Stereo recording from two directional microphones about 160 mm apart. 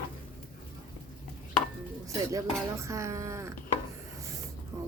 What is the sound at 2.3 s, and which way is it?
A woman's voice, 20° right (ahead or behind).